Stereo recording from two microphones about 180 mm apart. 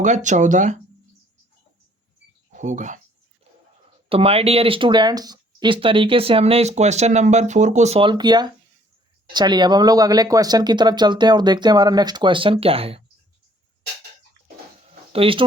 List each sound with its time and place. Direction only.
0.0 s speech: 40° right (ahead or behind)
2.5 s speech: 45° right (ahead or behind)
4.1 s speech: 30° right (ahead or behind)
15.1 s speech: 30° right (ahead or behind)